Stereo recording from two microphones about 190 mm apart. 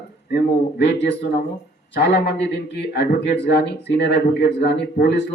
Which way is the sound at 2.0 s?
60° left (ahead or behind).